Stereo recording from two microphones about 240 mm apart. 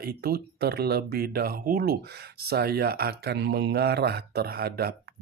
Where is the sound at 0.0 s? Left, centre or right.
Right.